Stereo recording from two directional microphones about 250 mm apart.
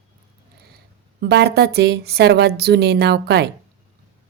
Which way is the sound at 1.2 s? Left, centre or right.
Right.